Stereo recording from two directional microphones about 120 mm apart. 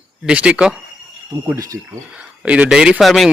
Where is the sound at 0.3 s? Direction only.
10° right (ahead or behind).